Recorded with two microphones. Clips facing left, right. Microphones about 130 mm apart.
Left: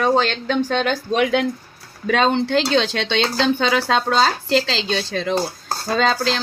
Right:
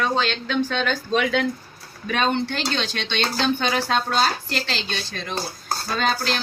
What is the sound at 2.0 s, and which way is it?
Speech, 90° left.